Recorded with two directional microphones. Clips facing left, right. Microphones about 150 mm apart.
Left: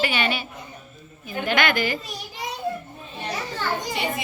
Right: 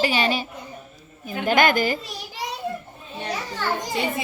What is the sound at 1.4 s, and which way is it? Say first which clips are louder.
Speech: right 4 dB; 45° right (ahead or behind).